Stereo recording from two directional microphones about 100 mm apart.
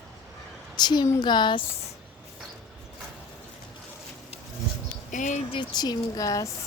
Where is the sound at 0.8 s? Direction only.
45° left (ahead or behind).